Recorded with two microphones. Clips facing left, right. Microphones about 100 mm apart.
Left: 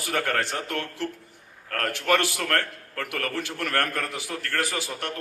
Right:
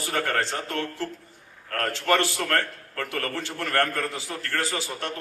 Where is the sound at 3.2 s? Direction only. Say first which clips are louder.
Left 3 dB; 20° right (ahead or behind).